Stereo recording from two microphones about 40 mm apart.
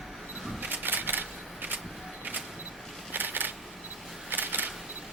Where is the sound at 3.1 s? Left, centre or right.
Right.